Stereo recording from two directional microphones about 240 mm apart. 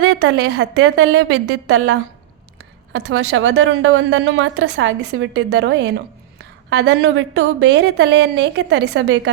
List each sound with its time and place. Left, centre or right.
0.0 s a woman's voice: right
1.6 s a woman's voice: right
2.9 s a woman's voice: right